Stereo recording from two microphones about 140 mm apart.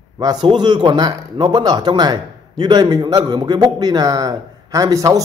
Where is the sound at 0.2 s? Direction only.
30° right (ahead or behind).